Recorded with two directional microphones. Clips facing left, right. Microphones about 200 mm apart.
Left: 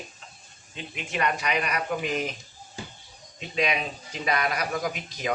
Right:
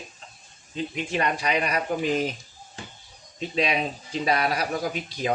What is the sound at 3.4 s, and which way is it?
Speech, 30° right (ahead or behind).